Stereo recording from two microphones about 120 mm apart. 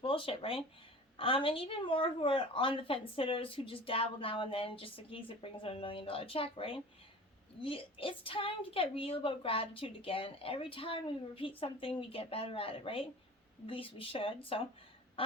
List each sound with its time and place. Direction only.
0.0 s a woman's voice: 50° left (ahead or behind)